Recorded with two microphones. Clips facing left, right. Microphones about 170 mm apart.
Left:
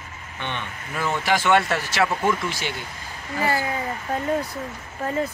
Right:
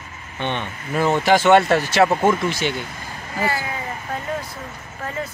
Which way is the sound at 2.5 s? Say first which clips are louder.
Right 6 dB; 20° right (ahead or behind).